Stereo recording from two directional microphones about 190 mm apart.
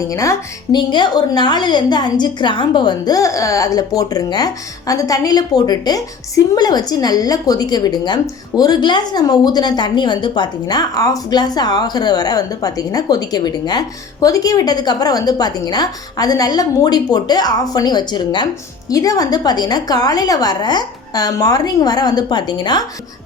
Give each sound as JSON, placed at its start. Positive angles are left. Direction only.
{"t": 0.1, "sound": "a woman's voice", "side_deg": 15}